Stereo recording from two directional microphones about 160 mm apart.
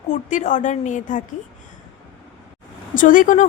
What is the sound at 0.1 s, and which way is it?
A woman's voice, 50° left (ahead or behind).